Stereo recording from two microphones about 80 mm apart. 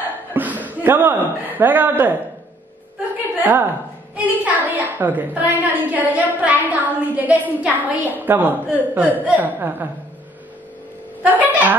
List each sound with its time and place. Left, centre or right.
0.3 s speech: right
3.3 s a woman's voice: right
11.2 s a woman's voice: right